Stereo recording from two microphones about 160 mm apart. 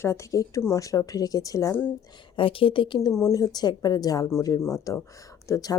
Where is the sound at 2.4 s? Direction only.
35° left (ahead or behind).